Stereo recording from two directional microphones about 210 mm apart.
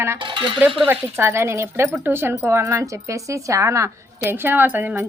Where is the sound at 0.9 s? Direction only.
10° right (ahead or behind).